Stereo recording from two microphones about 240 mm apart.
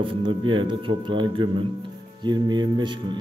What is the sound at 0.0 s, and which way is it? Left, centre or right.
Speech, right.